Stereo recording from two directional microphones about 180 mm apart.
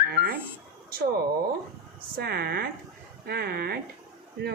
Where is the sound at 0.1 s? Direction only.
55° right (ahead or behind).